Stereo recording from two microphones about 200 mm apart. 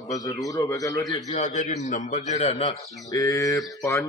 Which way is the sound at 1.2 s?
35° left (ahead or behind).